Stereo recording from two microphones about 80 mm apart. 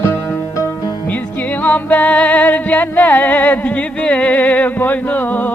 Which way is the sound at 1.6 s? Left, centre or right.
Centre.